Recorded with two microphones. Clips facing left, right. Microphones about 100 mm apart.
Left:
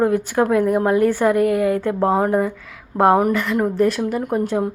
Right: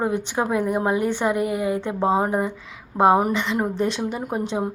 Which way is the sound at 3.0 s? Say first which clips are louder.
Left 2 dB; 20° right (ahead or behind).